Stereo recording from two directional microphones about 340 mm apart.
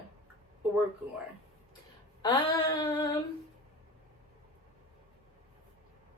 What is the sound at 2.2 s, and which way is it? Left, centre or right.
Speech, centre.